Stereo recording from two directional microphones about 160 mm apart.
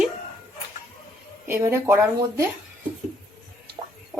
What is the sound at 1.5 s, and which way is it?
Speech, 15° right (ahead or behind).